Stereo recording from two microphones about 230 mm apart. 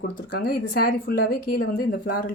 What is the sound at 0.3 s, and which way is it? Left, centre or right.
Speech, left.